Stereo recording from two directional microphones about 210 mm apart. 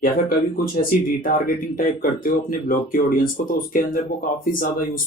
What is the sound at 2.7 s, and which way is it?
Speech, 40° left (ahead or behind).